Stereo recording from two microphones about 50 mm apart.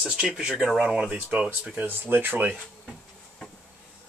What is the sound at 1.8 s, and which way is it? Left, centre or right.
Speech, right.